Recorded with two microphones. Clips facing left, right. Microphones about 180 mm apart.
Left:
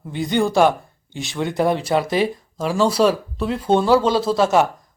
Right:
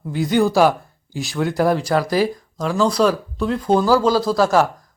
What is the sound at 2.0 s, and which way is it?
Speech, 25° left (ahead or behind).